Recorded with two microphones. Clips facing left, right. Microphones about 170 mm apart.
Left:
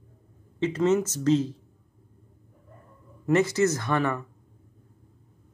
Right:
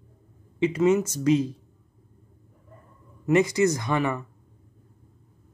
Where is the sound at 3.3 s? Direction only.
15° right (ahead or behind).